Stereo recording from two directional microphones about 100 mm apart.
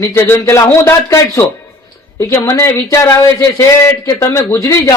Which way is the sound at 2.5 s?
30° left (ahead or behind).